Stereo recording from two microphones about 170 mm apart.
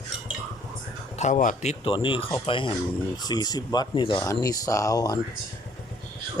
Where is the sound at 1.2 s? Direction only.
50° left (ahead or behind).